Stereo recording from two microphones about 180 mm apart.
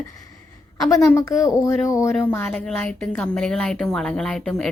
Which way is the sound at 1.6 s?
15° left (ahead or behind).